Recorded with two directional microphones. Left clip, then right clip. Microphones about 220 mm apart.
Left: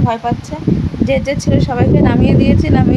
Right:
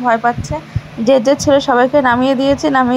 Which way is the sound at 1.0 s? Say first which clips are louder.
Right 7 dB; 20° right (ahead or behind).